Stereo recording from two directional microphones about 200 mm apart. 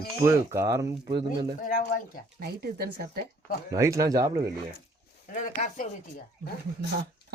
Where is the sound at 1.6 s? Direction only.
45° left (ahead or behind).